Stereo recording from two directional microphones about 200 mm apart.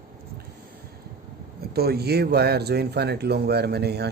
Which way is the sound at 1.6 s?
50° right (ahead or behind).